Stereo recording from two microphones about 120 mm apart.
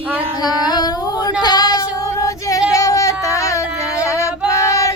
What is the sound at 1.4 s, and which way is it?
Female singing, 35° left (ahead or behind).